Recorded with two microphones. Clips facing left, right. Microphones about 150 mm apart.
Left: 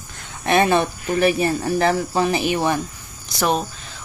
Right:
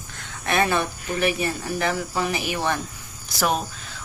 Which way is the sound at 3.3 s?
5° right (ahead or behind).